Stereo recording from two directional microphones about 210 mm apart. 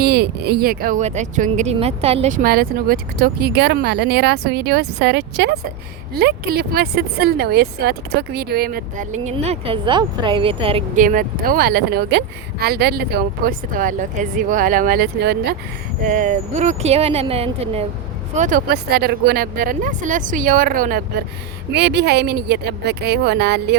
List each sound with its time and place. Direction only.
0.0 s speech: 50° right (ahead or behind); by 2.4 s 30° right (ahead or behind)
2.4 s speech: 45° right (ahead or behind); by 10.8 s 25° right (ahead or behind)
10.9 s speech: 40° right (ahead or behind)
16.0 s speech: 35° right (ahead or behind)
18.3 s speech: 40° right (ahead or behind)